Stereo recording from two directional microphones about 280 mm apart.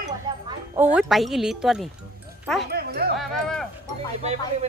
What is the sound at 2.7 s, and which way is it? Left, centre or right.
Dog, right.